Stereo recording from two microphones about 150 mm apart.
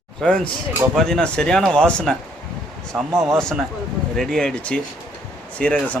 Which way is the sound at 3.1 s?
20° right (ahead or behind).